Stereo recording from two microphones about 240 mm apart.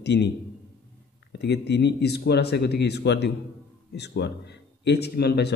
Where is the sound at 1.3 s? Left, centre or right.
Left.